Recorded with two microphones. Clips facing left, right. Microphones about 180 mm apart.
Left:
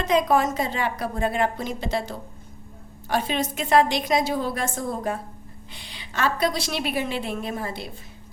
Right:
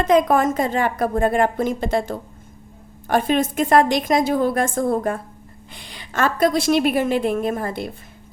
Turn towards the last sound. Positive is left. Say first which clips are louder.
# right 7 dB
turn(degrees=-50)  # may be behind; listen again after turning